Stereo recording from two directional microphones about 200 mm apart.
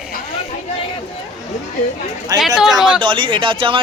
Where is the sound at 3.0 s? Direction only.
25° right (ahead or behind).